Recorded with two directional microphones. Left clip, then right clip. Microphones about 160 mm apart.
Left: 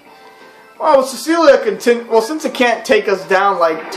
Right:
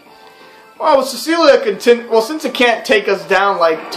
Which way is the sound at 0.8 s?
Centre (ahead or behind).